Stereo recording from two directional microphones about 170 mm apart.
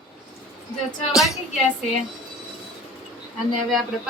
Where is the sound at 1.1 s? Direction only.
Centre (ahead or behind).